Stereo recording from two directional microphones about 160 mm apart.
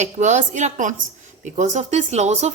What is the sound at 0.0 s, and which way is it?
A woman's voice, 50° right (ahead or behind).